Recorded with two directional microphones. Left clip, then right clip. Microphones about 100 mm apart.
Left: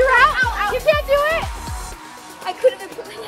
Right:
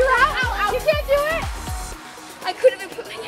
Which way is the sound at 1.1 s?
Centre (ahead or behind).